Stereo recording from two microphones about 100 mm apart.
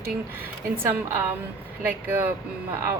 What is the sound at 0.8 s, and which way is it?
Speech, 25° right (ahead or behind).